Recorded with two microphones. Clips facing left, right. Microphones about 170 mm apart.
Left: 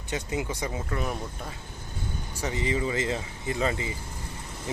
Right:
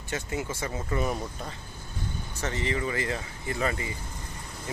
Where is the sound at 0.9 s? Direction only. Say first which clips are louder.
Right 5 dB; 5° right (ahead or behind).